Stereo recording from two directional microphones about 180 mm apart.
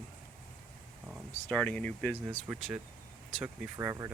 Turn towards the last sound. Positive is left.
turn(degrees=-15)  # may be behind; listen again after turning